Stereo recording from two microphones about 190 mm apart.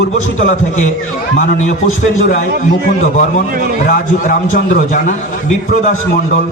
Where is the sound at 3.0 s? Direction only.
40° left (ahead or behind).